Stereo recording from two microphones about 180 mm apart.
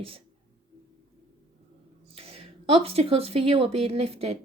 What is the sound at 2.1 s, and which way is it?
Speech, 35° right (ahead or behind).